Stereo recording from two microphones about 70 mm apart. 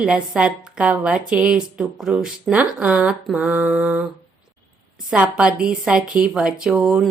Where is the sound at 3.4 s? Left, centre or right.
Centre.